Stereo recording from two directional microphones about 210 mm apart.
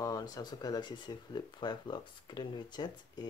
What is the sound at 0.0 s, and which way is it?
Speech, 15° left (ahead or behind).